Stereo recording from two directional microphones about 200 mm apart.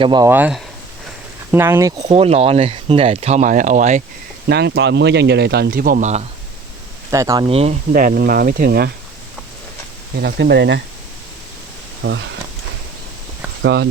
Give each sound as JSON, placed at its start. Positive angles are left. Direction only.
{"t": 0.0, "sound": "speech", "side_deg": -20}
{"t": 0.3, "sound": "speech", "side_deg": -10}
{"t": 2.1, "sound": "speech", "side_deg": -30}
{"t": 4.4, "sound": "speech", "side_deg": -55}
{"t": 7.1, "sound": "speech", "side_deg": -15}
{"t": 7.4, "sound": "speech", "side_deg": -30}
{"t": 7.9, "sound": "speech", "side_deg": -45}
{"t": 10.2, "sound": "speech", "side_deg": -55}
{"t": 12.0, "sound": "speech", "side_deg": -65}
{"t": 13.6, "sound": "speech", "side_deg": -60}